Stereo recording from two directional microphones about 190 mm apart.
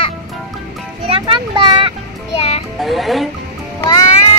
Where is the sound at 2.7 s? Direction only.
Centre (ahead or behind).